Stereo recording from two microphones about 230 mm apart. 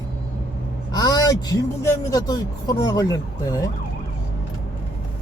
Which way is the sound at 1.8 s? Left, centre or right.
Centre.